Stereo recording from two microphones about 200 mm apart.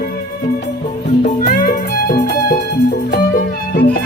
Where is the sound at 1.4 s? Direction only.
45° left (ahead or behind).